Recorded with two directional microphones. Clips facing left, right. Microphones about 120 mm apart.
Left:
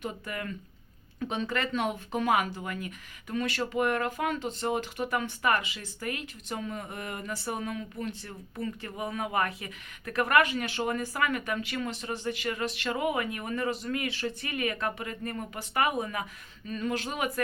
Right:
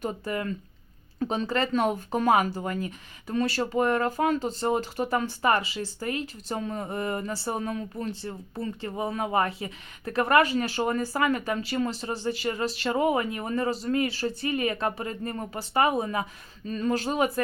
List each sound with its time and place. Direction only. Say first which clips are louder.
0.0 s speech: right 6 dB; 35° right (ahead or behind)